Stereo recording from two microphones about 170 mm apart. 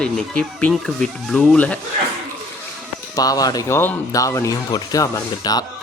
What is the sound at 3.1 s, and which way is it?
Speech, 20° left (ahead or behind).